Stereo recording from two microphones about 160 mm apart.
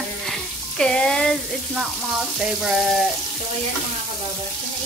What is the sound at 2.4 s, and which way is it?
Frying, centre (ahead or behind).